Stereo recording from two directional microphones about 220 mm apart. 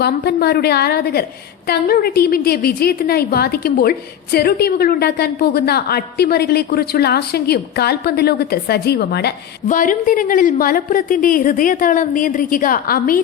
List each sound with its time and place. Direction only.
0.0 s a woman's voice: 45° left (ahead or behind)